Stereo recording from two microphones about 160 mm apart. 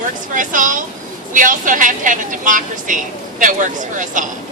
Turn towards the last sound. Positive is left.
turn(degrees=-55)  # may be behind; listen again after turning